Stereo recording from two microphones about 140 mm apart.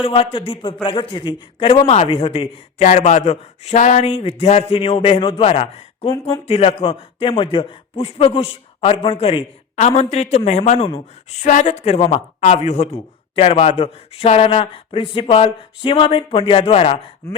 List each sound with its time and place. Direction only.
0.0 s a man's voice: 40° left (ahead or behind)
17.2 s chopping: 20° left (ahead or behind)